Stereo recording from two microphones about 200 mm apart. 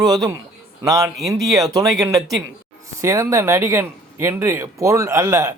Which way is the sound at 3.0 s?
15° right (ahead or behind).